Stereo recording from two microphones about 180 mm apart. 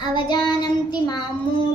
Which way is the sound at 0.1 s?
25° left (ahead or behind).